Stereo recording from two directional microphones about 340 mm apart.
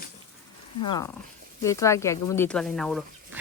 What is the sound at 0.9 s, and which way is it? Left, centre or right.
Speech, centre.